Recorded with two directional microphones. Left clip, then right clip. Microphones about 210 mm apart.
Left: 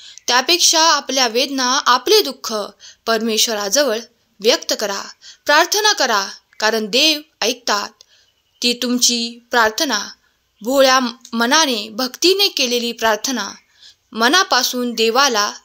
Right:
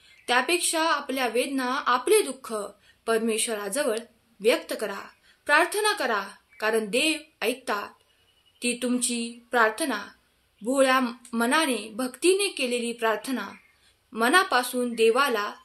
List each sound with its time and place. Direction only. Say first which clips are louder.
0.0 s a woman's voice: left 8 dB; 45° left (ahead or behind)